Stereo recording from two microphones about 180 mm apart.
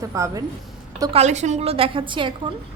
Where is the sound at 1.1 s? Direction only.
40° right (ahead or behind).